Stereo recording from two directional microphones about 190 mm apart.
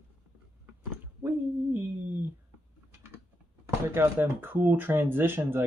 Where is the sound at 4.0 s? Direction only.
10° right (ahead or behind).